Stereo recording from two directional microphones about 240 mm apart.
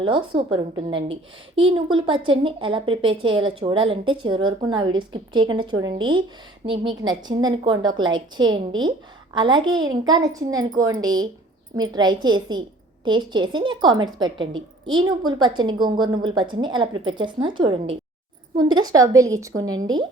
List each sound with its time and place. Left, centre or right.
0.0 s a woman's voice: right